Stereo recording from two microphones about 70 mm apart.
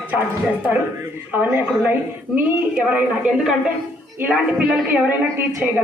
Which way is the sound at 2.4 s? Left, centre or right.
Right.